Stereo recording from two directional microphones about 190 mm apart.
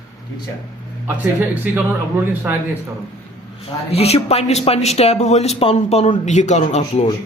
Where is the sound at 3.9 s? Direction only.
30° left (ahead or behind).